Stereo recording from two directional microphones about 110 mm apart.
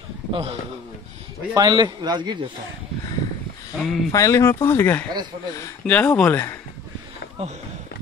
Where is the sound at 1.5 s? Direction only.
40° right (ahead or behind).